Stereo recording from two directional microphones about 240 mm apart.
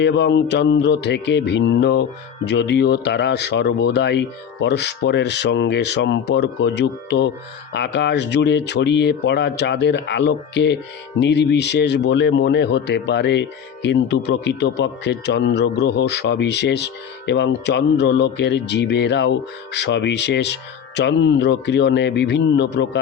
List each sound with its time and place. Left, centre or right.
0.0 s speech: left